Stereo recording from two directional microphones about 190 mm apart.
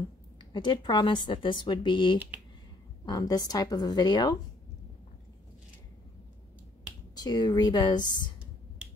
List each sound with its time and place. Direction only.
0.5 s a woman's voice: 25° left (ahead or behind)
7.2 s a woman's voice: 20° left (ahead or behind)